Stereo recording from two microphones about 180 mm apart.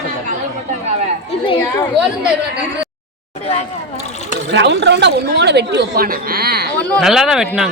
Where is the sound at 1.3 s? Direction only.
35° left (ahead or behind).